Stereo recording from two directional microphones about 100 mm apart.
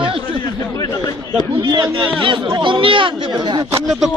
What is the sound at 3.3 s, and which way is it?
Speech, 45° right (ahead or behind).